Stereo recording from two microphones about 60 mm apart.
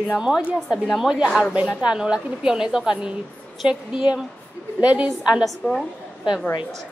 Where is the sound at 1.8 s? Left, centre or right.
Centre.